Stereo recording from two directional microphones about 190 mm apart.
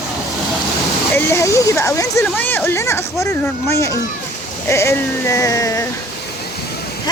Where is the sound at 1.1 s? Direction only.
15° left (ahead or behind).